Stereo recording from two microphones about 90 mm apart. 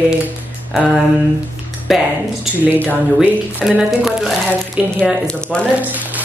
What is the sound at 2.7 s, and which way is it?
Speech, 20° left (ahead or behind).